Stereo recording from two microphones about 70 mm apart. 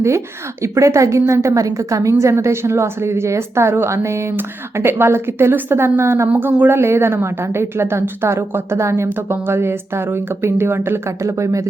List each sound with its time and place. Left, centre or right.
0.6 s a woman's voice: right
6.2 s a woman's voice: right